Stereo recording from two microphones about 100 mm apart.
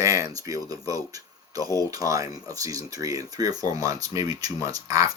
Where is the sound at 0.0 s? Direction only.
35° right (ahead or behind).